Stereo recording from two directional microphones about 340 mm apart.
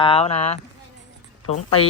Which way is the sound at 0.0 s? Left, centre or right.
Centre.